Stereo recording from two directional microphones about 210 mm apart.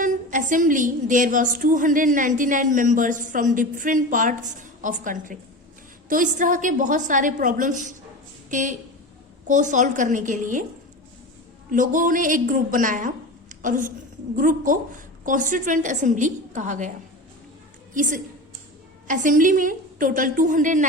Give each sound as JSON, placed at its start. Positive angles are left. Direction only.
{"t": 0.0, "sound": "a woman's voice", "side_deg": -35}
{"t": 11.7, "sound": "a woman's voice", "side_deg": -40}
{"t": 17.9, "sound": "a woman's voice", "side_deg": -40}